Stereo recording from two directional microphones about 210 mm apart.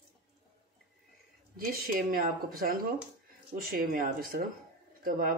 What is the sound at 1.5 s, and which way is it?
Speech, 45° right (ahead or behind).